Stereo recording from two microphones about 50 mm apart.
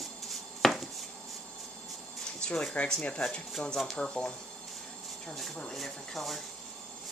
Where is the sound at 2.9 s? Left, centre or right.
Centre.